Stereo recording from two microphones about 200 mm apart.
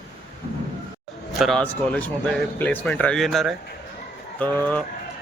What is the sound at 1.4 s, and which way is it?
Speech, 5° left (ahead or behind).